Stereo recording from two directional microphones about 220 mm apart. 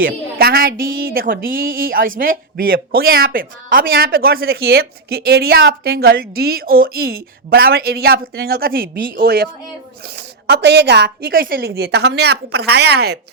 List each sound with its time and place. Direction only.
0.0 s speech: 45° right (ahead or behind)